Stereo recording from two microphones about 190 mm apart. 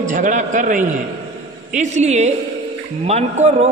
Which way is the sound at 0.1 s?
40° right (ahead or behind).